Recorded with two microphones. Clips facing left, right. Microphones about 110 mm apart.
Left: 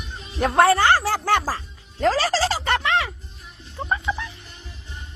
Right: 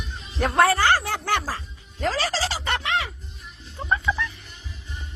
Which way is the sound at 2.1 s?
40° left (ahead or behind).